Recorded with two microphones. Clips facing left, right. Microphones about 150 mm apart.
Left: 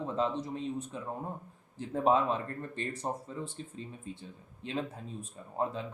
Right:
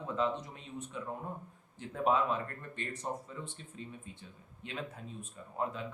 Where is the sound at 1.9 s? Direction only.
35° left (ahead or behind).